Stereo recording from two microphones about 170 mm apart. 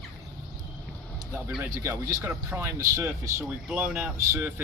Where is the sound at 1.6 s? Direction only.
15° right (ahead or behind).